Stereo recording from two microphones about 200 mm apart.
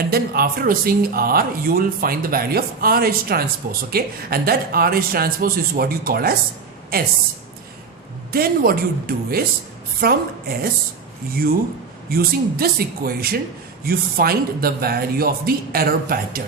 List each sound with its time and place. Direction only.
0.0 s speech: 50° right (ahead or behind)
8.3 s speech: 50° right (ahead or behind)
12.1 s speech: 50° right (ahead or behind)